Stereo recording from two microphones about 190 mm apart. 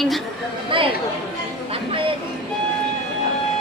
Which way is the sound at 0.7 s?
25° right (ahead or behind).